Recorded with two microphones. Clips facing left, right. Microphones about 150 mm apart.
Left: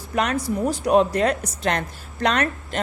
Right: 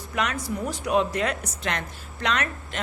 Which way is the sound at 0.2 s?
35° left (ahead or behind).